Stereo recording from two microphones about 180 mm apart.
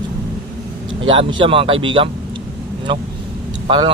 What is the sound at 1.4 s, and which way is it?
A man's voice, 30° right (ahead or behind).